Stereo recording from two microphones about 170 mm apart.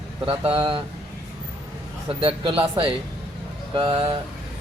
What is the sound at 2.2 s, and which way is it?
Speech, 30° right (ahead or behind).